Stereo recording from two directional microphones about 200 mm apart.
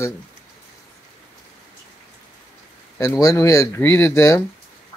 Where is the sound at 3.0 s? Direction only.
15° left (ahead or behind).